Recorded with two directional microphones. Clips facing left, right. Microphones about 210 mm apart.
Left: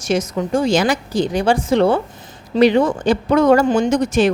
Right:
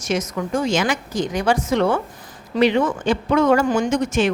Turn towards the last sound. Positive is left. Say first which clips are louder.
# left 4 dB
turn(degrees=35)  # may be behind; listen again after turning